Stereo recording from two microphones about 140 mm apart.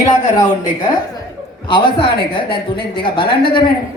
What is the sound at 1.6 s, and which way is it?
A man's voice, 35° left (ahead or behind).